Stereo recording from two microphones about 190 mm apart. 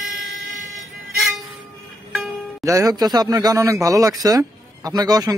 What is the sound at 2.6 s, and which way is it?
Speech, 20° right (ahead or behind).